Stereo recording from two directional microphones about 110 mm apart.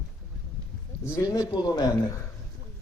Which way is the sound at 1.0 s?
30° left (ahead or behind).